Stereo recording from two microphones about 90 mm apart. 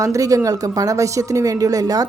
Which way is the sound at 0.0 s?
35° right (ahead or behind).